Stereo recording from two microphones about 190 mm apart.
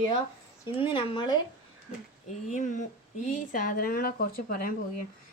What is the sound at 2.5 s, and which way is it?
Speech, 40° left (ahead or behind).